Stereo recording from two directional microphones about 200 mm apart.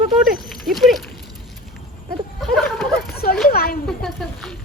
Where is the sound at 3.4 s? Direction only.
50° left (ahead or behind).